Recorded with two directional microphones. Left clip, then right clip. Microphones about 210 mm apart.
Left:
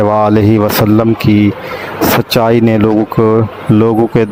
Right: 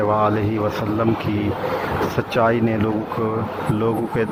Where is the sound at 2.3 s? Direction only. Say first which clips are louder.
Left 5 dB; 55° left (ahead or behind).